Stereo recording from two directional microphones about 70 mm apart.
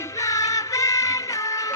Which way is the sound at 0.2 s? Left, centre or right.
Left.